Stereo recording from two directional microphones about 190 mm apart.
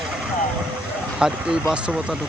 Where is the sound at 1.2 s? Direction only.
5° right (ahead or behind).